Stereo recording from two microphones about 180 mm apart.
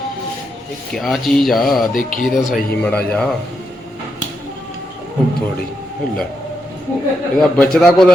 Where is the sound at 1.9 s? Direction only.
50° left (ahead or behind).